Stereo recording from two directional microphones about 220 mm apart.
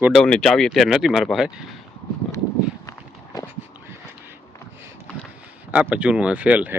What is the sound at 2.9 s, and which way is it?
Walk, 15° left (ahead or behind).